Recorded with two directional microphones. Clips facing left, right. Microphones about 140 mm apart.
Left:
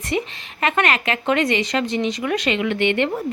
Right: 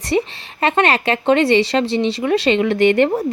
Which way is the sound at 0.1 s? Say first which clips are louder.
Right 6 dB; 35° right (ahead or behind).